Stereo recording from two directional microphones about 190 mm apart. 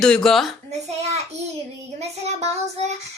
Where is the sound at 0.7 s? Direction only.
35° right (ahead or behind).